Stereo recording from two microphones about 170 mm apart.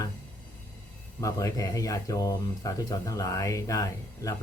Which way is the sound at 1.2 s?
20° left (ahead or behind).